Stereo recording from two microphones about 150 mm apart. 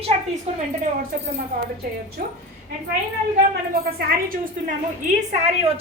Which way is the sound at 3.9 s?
70° right (ahead or behind).